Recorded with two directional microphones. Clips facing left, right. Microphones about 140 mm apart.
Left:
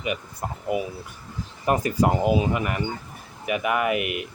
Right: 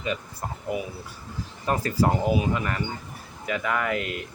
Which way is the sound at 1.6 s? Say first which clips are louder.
Left 2 dB; 15° left (ahead or behind).